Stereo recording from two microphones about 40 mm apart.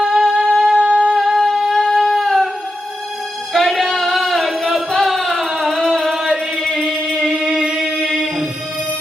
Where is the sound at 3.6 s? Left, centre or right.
Centre.